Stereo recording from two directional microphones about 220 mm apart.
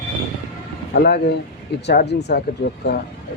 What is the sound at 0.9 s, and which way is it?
Speech, 50° left (ahead or behind).